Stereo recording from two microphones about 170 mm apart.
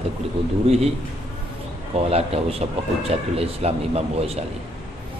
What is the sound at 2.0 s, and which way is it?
A man's voice, 35° right (ahead or behind).